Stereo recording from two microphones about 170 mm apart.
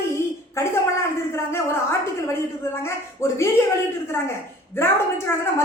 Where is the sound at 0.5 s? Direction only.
15° left (ahead or behind).